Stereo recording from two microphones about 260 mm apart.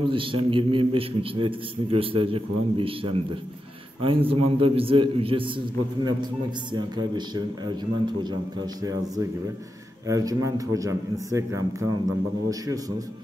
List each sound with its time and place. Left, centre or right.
0.0 s a man's voice: centre
6.7 s a man's voice: centre